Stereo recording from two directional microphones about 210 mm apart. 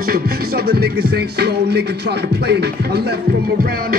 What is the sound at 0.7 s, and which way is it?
Music, 50° right (ahead or behind).